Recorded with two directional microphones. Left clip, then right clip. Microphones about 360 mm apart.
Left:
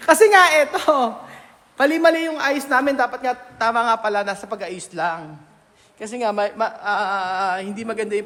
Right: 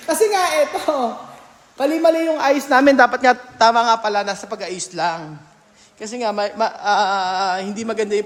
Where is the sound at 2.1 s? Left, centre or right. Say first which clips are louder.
Right 2 dB; centre; by 3.3 s right.